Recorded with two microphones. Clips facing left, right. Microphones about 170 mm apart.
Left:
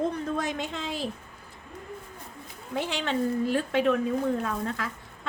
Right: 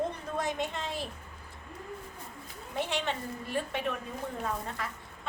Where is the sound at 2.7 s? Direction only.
90° left.